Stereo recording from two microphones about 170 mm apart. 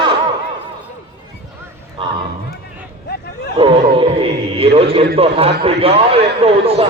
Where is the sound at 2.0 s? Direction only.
30° right (ahead or behind).